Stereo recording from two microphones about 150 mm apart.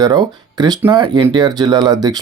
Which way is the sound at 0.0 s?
25° right (ahead or behind).